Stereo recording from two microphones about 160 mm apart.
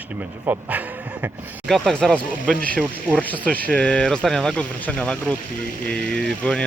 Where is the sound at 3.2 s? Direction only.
10° left (ahead or behind).